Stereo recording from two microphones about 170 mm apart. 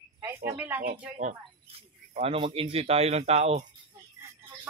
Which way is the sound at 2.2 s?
30° right (ahead or behind).